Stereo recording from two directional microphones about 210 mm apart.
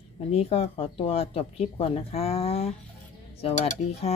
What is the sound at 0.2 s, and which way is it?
Speech, 30° left (ahead or behind).